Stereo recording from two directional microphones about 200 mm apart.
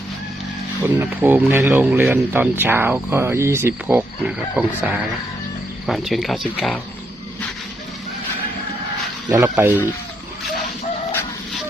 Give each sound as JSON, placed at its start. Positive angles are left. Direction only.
{"t": 0.9, "sound": "speech", "side_deg": -10}
{"t": 9.3, "sound": "speech", "side_deg": -15}